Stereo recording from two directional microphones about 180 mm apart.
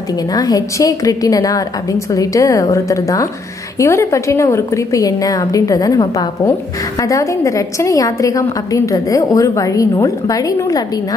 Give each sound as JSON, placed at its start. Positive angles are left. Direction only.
{"t": 0.3, "sound": "a woman's voice", "side_deg": 20}